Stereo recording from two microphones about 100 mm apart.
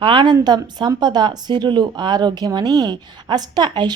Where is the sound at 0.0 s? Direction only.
55° right (ahead or behind).